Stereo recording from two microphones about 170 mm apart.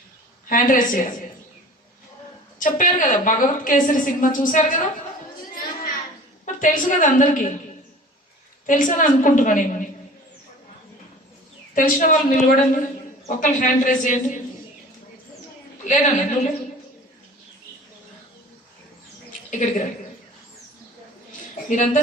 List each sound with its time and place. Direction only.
0.4 s a woman's voice: 55° left (ahead or behind)
2.6 s a woman's voice: 50° left (ahead or behind)
5.5 s a sound: 55° left (ahead or behind)
6.4 s a woman's voice: 50° left (ahead or behind)
8.6 s a woman's voice: 50° left (ahead or behind)
11.7 s a woman's voice: 50° left (ahead or behind)
15.8 s a woman's voice: 45° left (ahead or behind)
19.5 s a woman's voice: 45° left (ahead or behind)
21.7 s a woman's voice: 50° left (ahead or behind)